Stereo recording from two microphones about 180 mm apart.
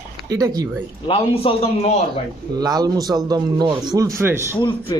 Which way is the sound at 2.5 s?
20° right (ahead or behind).